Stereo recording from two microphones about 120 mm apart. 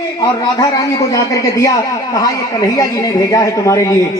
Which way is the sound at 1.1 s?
25° left (ahead or behind).